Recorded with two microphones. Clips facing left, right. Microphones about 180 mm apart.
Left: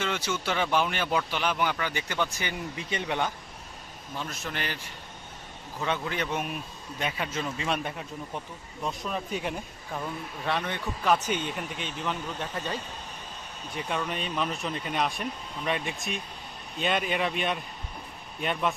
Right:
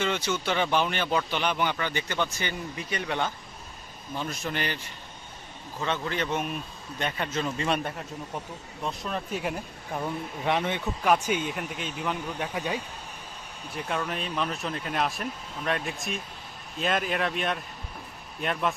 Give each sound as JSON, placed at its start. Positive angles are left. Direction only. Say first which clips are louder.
{"t": 0.0, "sound": "speech", "louder": "right 2 dB", "side_deg": 5}
{"t": 2.7, "sound": "speech", "louder": "left 1 dB", "side_deg": 20}
{"t": 4.3, "sound": "speech", "louder": "right 5 dB", "side_deg": 0}
{"t": 5.8, "sound": "a man's voice", "louder": "right 1 dB", "side_deg": 10}
{"t": 9.9, "sound": "speech", "louder": "right 3 dB", "side_deg": -15}
{"t": 13.7, "sound": "speech", "louder": "right 1 dB", "side_deg": 0}